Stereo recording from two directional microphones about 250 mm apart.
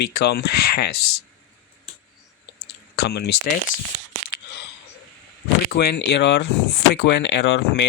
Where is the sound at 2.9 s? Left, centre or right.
Left.